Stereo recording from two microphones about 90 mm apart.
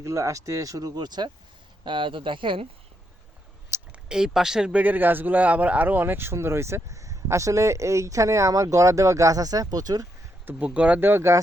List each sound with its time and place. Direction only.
0.0 s a man's voice: 35° right (ahead or behind); by 1.3 s 55° right (ahead or behind)
1.8 s speech: 65° right (ahead or behind)
3.9 s a man's voice: 5° right (ahead or behind); by 10.1 s 45° right (ahead or behind)
10.4 s speech: 15° right (ahead or behind)